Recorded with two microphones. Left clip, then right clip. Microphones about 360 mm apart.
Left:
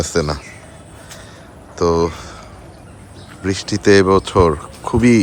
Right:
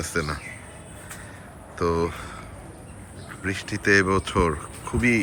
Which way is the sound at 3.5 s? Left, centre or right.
Centre.